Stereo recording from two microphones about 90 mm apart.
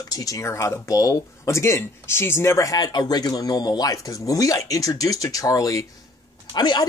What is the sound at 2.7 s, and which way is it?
Speech, 50° left (ahead or behind).